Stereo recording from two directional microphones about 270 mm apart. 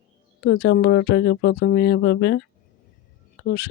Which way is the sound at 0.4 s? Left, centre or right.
Left.